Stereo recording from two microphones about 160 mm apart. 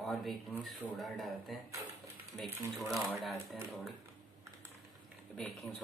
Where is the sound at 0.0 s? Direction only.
Centre (ahead or behind).